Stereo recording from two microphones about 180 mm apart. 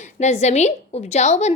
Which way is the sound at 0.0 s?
40° left (ahead or behind).